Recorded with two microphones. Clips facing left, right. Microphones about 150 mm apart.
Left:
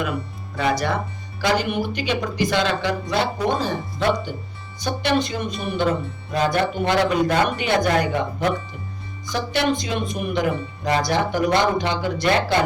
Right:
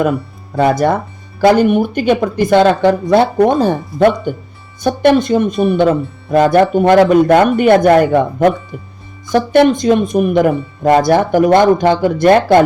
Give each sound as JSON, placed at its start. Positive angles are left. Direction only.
{"t": 0.5, "sound": "speech", "side_deg": -50}